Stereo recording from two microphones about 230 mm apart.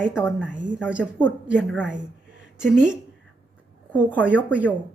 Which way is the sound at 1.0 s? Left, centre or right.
Centre.